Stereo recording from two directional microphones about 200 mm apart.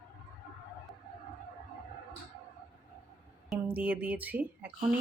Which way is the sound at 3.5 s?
10° right (ahead or behind).